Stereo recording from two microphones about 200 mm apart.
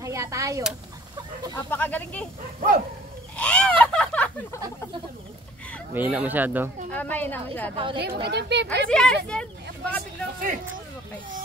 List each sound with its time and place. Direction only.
0.0 s speech: 15° right (ahead or behind)
1.5 s a woman's voice: 10° left (ahead or behind)
3.3 s a sound: 5° left (ahead or behind)
5.9 s speech: 10° right (ahead or behind)
6.9 s a woman's voice: 10° left (ahead or behind)
7.7 s speech: 25° right (ahead or behind)
8.0 s speech: 55° right (ahead or behind)
8.6 s speech: 5° left (ahead or behind)